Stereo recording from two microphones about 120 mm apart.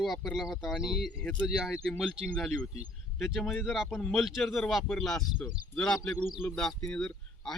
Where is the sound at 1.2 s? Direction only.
10° left (ahead or behind).